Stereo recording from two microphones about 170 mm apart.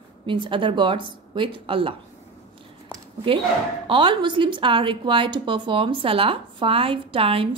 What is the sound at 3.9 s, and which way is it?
A woman's voice, 30° right (ahead or behind).